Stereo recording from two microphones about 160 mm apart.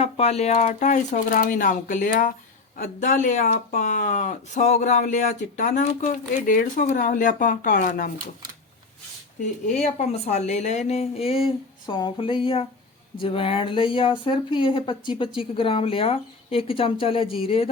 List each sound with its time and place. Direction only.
0.0 s speech: 40° left (ahead or behind); by 8.1 s 55° left (ahead or behind)
9.8 s speech: 45° left (ahead or behind)